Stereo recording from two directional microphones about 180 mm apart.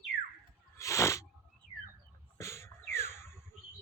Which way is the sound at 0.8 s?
15° left (ahead or behind).